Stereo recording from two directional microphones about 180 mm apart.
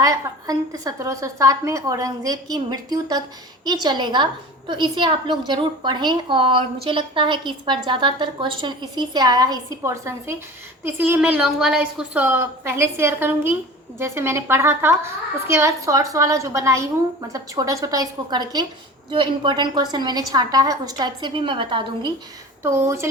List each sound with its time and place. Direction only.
0.0 s a woman's voice: 20° right (ahead or behind)
22.6 s a woman's voice: 15° right (ahead or behind)